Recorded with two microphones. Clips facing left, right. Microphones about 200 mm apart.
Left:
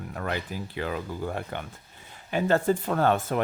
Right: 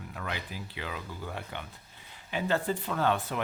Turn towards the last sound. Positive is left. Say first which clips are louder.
# left 5 dB
turn(degrees=45)  # may be behind; listen again after turning